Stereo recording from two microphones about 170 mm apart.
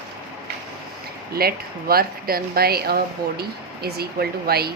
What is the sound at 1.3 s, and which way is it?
Speech, 65° right (ahead or behind).